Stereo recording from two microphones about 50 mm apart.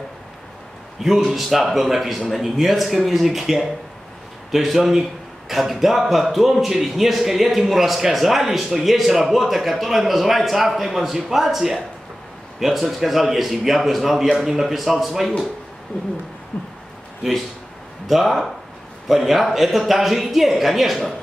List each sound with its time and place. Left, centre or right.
0.9 s a man's voice: centre
16.5 s a sound: left
18.0 s a man's voice: centre